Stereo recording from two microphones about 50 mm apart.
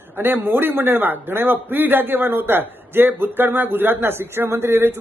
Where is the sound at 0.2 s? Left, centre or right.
Right.